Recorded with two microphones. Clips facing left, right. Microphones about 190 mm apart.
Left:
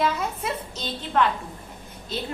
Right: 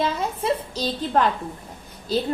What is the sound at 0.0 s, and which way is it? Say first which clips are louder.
A woman's voice: right 1 dB; 30° right (ahead or behind).